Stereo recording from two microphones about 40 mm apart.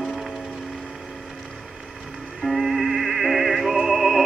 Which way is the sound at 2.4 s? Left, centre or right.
Centre.